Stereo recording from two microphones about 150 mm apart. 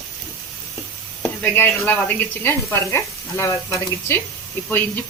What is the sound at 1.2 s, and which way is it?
Speech, 15° left (ahead or behind).